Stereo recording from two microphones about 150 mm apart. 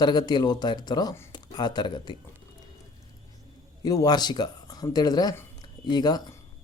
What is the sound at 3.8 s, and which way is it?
Speech, 25° left (ahead or behind).